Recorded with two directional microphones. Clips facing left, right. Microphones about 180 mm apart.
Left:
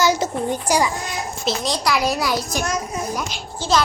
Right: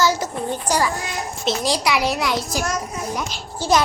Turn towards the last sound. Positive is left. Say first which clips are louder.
# right 2 dB
turn(degrees=-10)  # may be behind; listen again after turning